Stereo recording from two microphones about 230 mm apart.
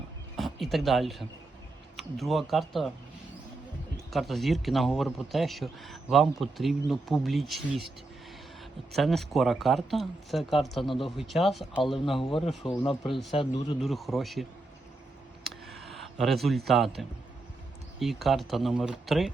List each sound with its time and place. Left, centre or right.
0.3 s speech: centre
4.1 s speech: centre
8.9 s speech: centre
12.1 s speech: left
13.8 s speech: centre
15.4 s a sound: centre
16.6 s speech: centre